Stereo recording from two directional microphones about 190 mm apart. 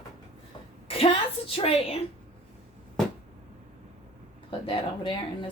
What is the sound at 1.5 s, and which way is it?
Speech, 30° left (ahead or behind).